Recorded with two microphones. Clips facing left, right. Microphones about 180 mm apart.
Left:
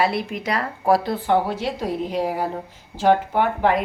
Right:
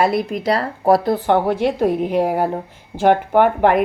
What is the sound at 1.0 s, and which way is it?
Speech, 60° right (ahead or behind).